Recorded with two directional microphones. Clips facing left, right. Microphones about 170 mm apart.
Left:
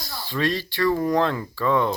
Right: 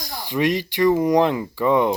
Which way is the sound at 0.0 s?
15° right (ahead or behind).